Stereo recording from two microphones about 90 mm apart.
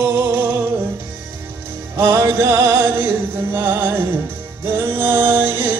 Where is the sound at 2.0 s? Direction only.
30° right (ahead or behind).